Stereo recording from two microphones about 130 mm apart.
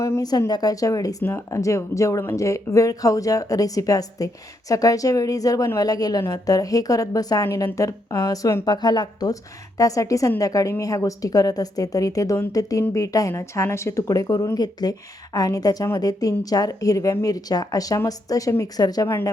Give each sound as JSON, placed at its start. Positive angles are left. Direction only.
{"t": 0.0, "sound": "a woman's voice", "side_deg": 25}